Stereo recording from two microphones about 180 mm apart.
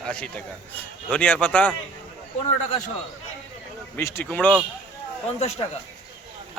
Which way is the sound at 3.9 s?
15° left (ahead or behind).